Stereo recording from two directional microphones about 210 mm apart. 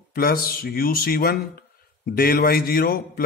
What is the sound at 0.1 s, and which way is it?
Speech, 45° left (ahead or behind).